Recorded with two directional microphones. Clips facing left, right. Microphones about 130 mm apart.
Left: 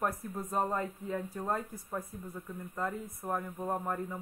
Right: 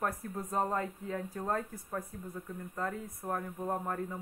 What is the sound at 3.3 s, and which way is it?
Speech, 5° left (ahead or behind).